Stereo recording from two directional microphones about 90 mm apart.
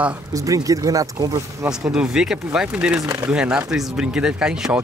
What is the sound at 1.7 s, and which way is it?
Speech, 10° right (ahead or behind).